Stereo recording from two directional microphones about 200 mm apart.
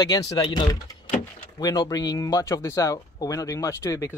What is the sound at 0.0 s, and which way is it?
Speech, 20° left (ahead or behind).